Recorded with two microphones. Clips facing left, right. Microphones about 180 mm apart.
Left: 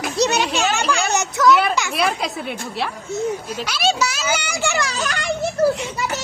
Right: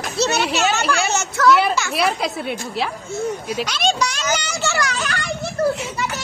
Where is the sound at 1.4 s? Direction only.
Centre (ahead or behind).